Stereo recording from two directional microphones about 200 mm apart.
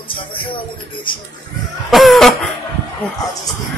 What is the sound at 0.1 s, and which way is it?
Speech, 25° left (ahead or behind).